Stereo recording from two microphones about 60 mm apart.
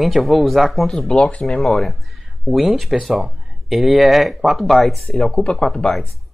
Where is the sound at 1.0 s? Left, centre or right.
Centre.